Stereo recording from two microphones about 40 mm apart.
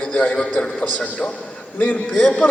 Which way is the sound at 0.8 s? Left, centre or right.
Left.